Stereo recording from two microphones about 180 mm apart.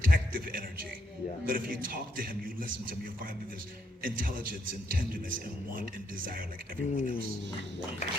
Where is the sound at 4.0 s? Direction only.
50° right (ahead or behind).